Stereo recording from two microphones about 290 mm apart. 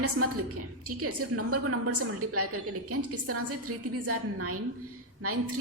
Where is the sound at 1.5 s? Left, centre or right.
Right.